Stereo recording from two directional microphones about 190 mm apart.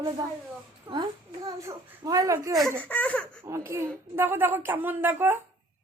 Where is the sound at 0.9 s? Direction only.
30° right (ahead or behind).